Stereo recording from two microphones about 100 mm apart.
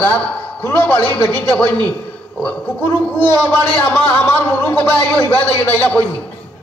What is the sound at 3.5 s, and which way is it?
A man's voice, 15° left (ahead or behind).